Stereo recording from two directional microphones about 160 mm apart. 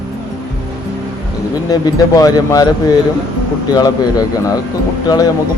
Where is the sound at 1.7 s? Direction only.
20° left (ahead or behind).